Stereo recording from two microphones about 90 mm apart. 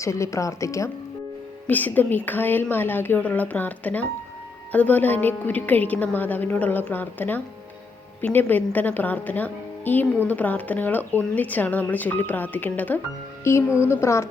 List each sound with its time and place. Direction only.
0.0 s speech: 35° left (ahead or behind)
1.6 s a woman's voice: 20° left (ahead or behind)